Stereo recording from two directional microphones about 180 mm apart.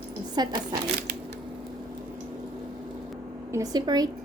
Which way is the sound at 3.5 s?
20° right (ahead or behind).